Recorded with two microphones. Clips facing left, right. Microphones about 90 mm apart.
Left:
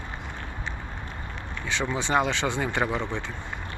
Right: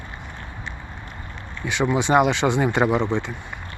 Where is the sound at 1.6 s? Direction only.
15° right (ahead or behind).